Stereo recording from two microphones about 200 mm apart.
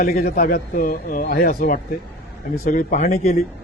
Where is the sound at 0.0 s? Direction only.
45° left (ahead or behind).